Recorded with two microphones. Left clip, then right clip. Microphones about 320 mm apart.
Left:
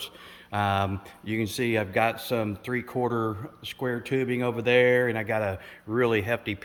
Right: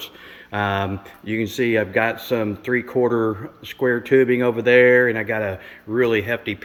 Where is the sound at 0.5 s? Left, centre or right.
Centre.